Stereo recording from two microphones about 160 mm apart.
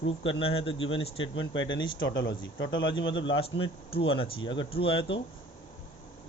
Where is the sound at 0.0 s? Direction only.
35° left (ahead or behind).